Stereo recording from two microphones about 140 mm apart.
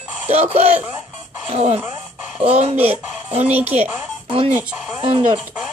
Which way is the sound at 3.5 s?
10° right (ahead or behind).